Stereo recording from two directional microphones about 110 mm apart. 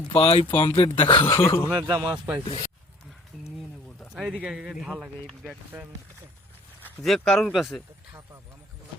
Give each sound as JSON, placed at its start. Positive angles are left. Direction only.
{"t": 0.1, "sound": "speech", "side_deg": 55}
{"t": 1.3, "sound": "speech", "side_deg": 20}
{"t": 1.9, "sound": "speech", "side_deg": -10}
{"t": 3.3, "sound": "rain", "side_deg": 5}
{"t": 4.1, "sound": "speech", "side_deg": -5}
{"t": 5.2, "sound": "speech", "side_deg": 5}
{"t": 7.0, "sound": "speech", "side_deg": 5}